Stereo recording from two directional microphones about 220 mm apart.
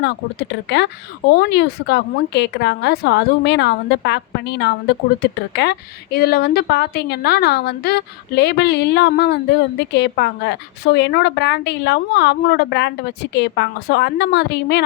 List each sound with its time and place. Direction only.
0.0 s a woman's voice: 50° left (ahead or behind)